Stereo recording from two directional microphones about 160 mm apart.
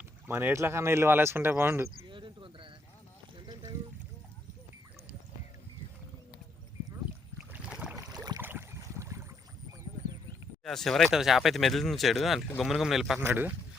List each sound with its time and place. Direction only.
0.3 s speech: 15° right (ahead or behind)
2.0 s a sound: 30° right (ahead or behind)
7.5 s boat: 10° right (ahead or behind)
7.9 s boat: 25° right (ahead or behind)
8.4 s boat: 15° right (ahead or behind)
10.6 s speech: centre (ahead or behind)
13.1 s speech: 10° right (ahead or behind)